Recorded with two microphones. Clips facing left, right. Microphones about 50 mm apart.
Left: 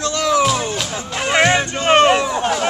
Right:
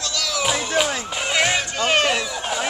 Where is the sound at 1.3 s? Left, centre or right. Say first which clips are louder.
Left 6 dB; left.